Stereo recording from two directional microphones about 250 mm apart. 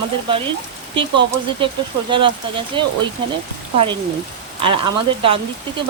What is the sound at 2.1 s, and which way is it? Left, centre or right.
Speech, centre.